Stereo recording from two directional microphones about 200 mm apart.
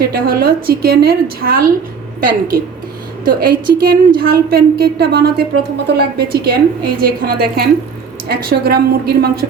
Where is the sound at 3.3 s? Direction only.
45° right (ahead or behind).